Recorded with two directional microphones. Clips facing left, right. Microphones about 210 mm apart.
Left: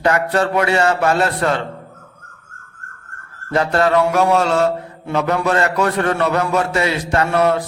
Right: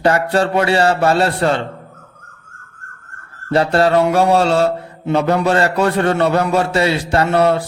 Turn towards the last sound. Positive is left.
turn(degrees=-30)  # may be behind; listen again after turning